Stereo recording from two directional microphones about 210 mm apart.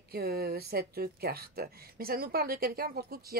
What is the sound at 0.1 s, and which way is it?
Speech, 45° right (ahead or behind).